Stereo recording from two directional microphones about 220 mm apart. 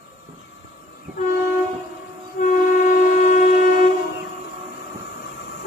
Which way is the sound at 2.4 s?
40° left (ahead or behind).